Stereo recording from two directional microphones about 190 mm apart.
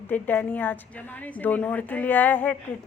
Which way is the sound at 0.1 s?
10° left (ahead or behind).